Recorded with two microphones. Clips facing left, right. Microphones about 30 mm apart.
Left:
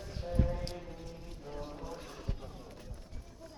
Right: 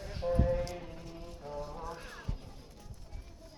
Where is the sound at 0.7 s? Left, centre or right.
Centre.